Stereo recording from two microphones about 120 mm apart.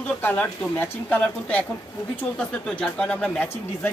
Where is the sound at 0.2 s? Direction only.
15° left (ahead or behind).